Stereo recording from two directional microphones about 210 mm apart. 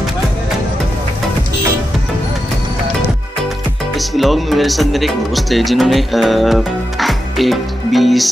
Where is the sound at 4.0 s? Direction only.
Centre (ahead or behind).